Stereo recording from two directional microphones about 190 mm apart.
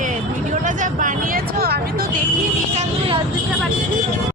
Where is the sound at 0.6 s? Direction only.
45° right (ahead or behind).